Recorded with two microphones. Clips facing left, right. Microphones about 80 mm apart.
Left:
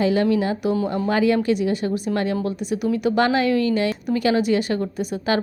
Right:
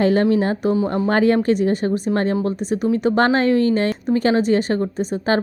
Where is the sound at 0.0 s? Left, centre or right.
Right.